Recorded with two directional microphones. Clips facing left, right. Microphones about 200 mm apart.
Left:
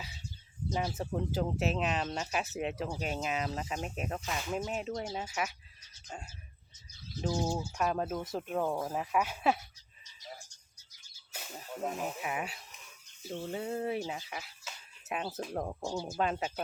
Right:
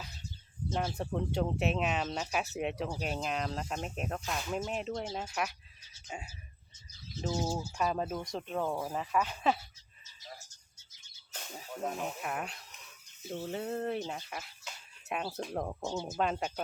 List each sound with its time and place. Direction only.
0.7 s speech: centre (ahead or behind)
11.3 s speech: 5° left (ahead or behind)
15.8 s speech: 20° right (ahead or behind)
16.1 s speech: centre (ahead or behind)